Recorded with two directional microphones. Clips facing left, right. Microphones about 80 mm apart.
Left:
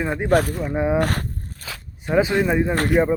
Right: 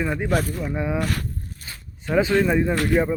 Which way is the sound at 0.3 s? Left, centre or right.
Left.